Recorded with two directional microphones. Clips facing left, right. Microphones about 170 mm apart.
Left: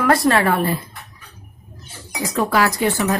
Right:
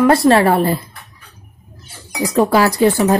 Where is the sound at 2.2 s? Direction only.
30° right (ahead or behind).